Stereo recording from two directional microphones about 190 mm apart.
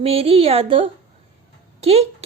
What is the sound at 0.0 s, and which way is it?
A woman's voice, 30° right (ahead or behind).